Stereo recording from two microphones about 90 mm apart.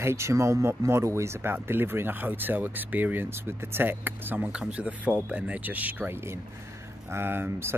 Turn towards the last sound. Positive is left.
turn(degrees=-25)  # may be behind; listen again after turning